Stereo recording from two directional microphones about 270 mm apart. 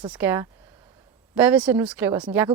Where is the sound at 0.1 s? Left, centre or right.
Centre.